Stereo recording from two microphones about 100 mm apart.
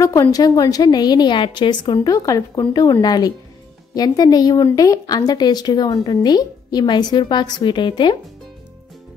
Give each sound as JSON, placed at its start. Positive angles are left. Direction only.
{"t": 0.0, "sound": "a woman's voice", "side_deg": 30}
{"t": 2.1, "sound": "a woman's voice", "side_deg": 35}